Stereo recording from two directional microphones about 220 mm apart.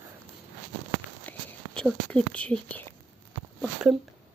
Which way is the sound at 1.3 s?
5° left (ahead or behind).